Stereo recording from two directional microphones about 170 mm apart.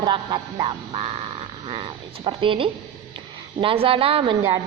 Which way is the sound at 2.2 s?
30° right (ahead or behind).